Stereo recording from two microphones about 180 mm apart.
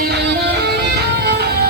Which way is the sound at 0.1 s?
65° right (ahead or behind).